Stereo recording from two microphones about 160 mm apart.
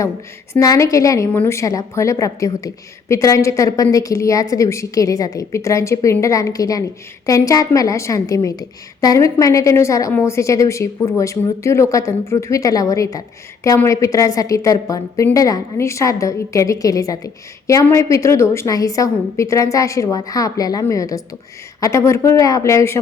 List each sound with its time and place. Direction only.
0.6 s a woman's voice: 20° left (ahead or behind)